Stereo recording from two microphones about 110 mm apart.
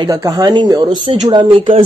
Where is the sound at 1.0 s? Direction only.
60° right (ahead or behind).